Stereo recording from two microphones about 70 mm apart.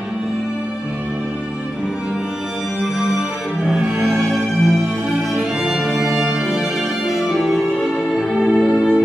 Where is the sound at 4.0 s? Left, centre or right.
Centre.